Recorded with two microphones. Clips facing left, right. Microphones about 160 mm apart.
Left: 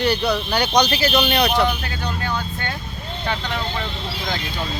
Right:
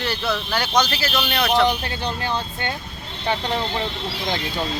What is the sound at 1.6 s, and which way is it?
Speech, 30° right (ahead or behind).